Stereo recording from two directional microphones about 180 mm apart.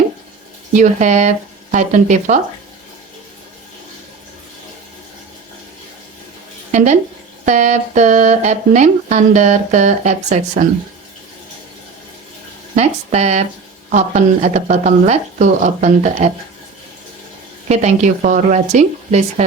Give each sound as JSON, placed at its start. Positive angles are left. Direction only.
{"t": 0.8, "sound": "speech", "side_deg": -40}
{"t": 6.7, "sound": "speech", "side_deg": -40}
{"t": 12.7, "sound": "speech", "side_deg": -40}
{"t": 17.7, "sound": "speech", "side_deg": -40}